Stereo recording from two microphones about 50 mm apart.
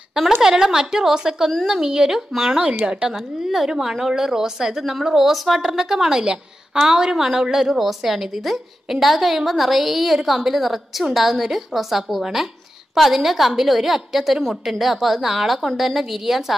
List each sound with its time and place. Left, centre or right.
0.4 s a woman's voice: centre
2.8 s a woman's voice: right
3.4 s a woman's voice: centre